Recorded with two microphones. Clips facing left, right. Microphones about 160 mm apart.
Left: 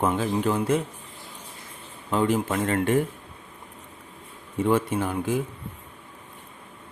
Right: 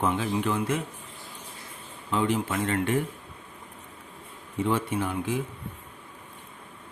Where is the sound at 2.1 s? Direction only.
45° left (ahead or behind).